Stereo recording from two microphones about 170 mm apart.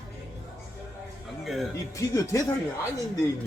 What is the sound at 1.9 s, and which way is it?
Speech, 20° left (ahead or behind).